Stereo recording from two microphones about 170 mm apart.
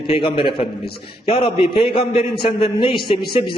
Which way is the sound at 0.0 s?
30° left (ahead or behind).